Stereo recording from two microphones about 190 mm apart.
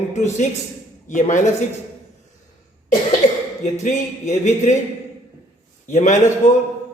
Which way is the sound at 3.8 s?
40° left (ahead or behind).